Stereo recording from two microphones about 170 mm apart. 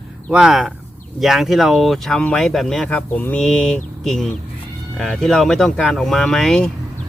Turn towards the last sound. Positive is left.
turn(degrees=5)  # may be behind; listen again after turning